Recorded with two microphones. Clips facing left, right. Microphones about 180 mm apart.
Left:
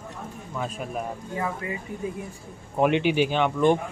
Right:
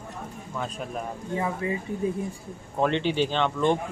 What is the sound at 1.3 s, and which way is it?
Speech, 25° right (ahead or behind).